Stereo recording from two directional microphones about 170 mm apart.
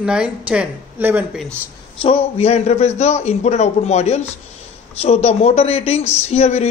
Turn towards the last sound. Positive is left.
turn(degrees=40)  # may be behind; listen again after turning